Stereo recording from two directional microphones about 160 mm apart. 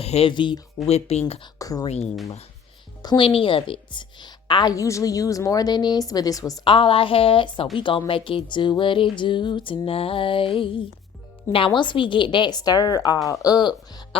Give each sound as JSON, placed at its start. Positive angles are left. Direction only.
{"t": 0.0, "sound": "speech", "side_deg": 40}
{"t": 0.9, "sound": "music", "side_deg": 40}
{"t": 1.5, "sound": "a woman's voice", "side_deg": 25}
{"t": 3.0, "sound": "a woman's voice", "side_deg": 30}
{"t": 7.8, "sound": "music", "side_deg": 30}
{"t": 11.5, "sound": "a woman's voice", "side_deg": 30}